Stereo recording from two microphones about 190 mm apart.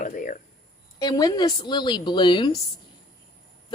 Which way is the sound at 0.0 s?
45° left (ahead or behind).